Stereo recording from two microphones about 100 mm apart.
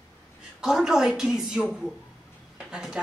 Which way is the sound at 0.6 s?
5° right (ahead or behind).